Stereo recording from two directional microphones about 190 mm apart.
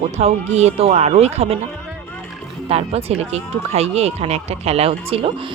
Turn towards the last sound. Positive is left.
turn(degrees=-30)  # may be behind; listen again after turning